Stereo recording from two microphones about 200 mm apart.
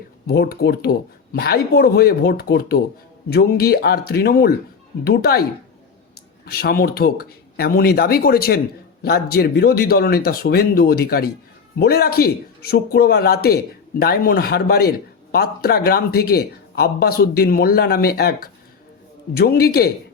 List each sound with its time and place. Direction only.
0.3 s speech: 50° left (ahead or behind)
6.4 s speech: 50° left (ahead or behind)